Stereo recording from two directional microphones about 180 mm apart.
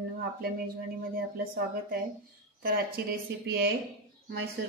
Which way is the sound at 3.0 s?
60° right (ahead or behind).